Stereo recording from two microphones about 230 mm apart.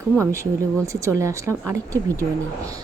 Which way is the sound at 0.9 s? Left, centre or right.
Centre.